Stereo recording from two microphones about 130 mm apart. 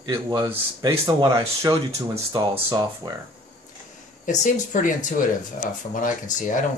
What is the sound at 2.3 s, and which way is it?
Speech, 45° right (ahead or behind).